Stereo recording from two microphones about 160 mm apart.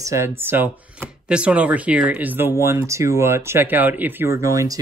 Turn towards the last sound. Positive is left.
turn(degrees=-20)  # may be behind; listen again after turning